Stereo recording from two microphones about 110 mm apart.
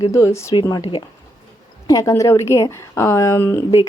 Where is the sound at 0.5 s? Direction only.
45° left (ahead or behind).